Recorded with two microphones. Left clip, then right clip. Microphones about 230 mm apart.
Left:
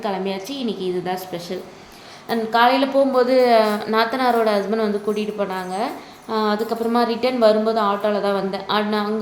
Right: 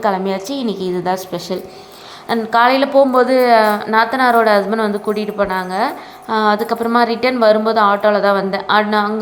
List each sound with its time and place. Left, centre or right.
0.0 s a woman's voice: centre